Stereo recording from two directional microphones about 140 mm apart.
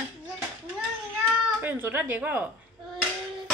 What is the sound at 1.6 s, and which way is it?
Speech, 15° right (ahead or behind).